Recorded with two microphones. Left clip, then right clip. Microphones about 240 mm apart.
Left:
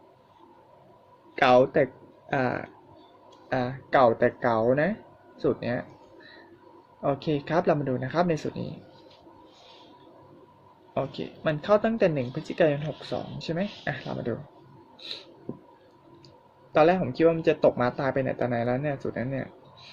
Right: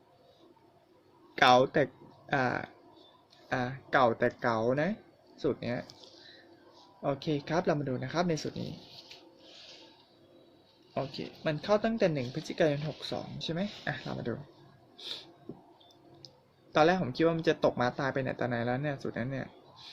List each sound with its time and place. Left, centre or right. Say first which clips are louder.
1.4 s speech: left 4 dB; right
7.0 s speech: left 5 dB; centre
10.9 s speech: left 6 dB; centre
16.7 s speech: left 5 dB; right